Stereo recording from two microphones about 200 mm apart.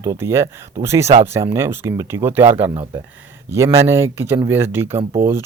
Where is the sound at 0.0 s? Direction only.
15° right (ahead or behind).